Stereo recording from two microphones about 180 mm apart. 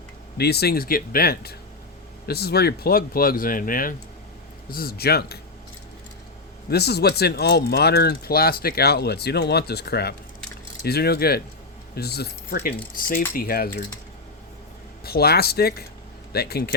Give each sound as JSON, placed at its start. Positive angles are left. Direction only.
{"t": 0.3, "sound": "speech", "side_deg": 65}
{"t": 6.7, "sound": "speech", "side_deg": 65}
{"t": 15.0, "sound": "speech", "side_deg": 60}